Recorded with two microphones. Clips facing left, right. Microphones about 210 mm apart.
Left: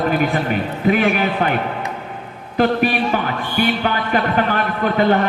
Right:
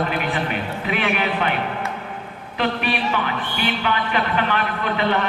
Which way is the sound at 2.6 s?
45° left (ahead or behind).